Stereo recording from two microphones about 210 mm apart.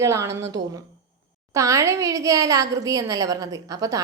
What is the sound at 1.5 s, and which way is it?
A woman's voice, 15° right (ahead or behind).